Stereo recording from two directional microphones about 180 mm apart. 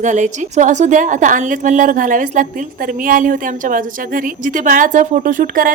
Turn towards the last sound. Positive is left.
turn(degrees=-50)  # may be behind; listen again after turning